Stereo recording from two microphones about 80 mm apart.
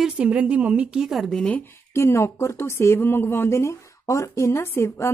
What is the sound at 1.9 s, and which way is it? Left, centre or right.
Speech, left.